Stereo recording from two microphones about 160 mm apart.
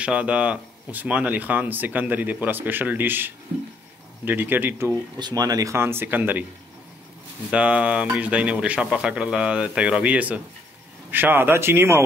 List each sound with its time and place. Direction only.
0.0 s speech: 5° right (ahead or behind)
7.5 s speech: 10° right (ahead or behind)